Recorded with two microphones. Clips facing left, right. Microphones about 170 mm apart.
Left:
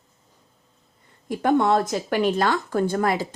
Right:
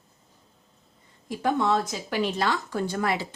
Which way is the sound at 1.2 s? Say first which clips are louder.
Left 5 dB; 55° left (ahead or behind).